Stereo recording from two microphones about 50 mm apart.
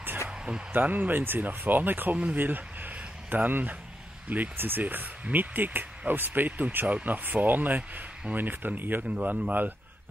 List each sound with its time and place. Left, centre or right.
0.7 s speech: right
2.3 s a sound: right
4.3 s speech: right
9.1 s speech: right